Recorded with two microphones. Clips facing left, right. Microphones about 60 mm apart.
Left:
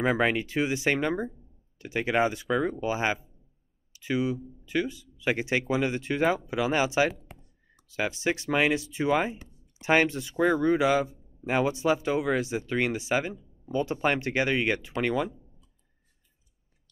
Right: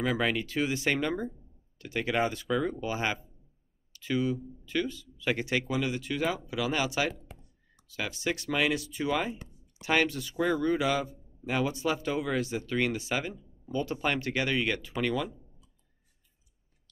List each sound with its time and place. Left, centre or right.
0.0 s speech: left